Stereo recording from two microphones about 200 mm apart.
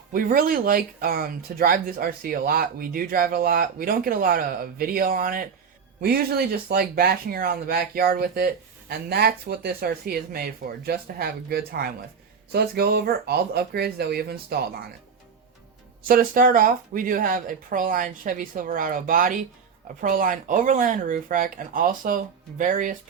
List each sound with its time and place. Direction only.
0.1 s speech: 45° right (ahead or behind)
16.0 s speech: 45° right (ahead or behind)